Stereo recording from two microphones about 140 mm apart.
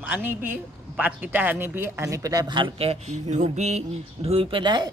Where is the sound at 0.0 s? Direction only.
15° right (ahead or behind).